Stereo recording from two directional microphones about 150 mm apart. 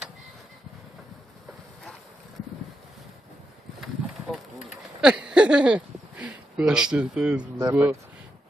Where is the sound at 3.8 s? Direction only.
Centre (ahead or behind).